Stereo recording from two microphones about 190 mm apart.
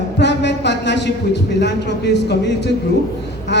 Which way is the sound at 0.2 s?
65° left (ahead or behind).